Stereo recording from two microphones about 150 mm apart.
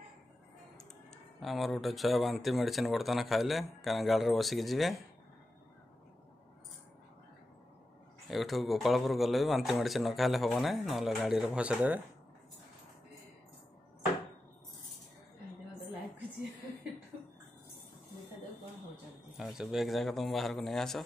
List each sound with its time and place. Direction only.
1.4 s speech: centre (ahead or behind)
8.3 s speech: centre (ahead or behind)
19.3 s speech: 5° right (ahead or behind)